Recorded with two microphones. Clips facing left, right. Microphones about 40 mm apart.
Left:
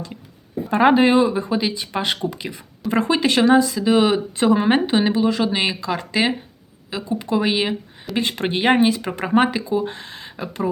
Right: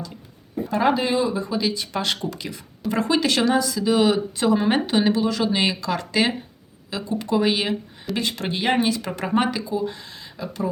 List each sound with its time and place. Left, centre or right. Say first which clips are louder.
0.7 s speech: left 6 dB; left; by 7.8 s centre
8.1 s speech: left 4 dB; left